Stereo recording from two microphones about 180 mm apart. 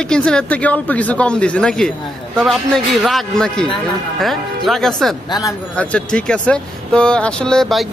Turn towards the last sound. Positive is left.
turn(degrees=0)  # may be behind; listen again after turning